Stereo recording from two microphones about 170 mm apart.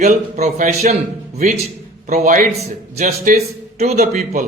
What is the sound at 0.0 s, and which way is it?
Speech, 45° right (ahead or behind).